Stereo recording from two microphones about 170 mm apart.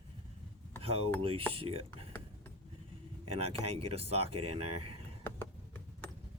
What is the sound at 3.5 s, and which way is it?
Speech, 35° right (ahead or behind).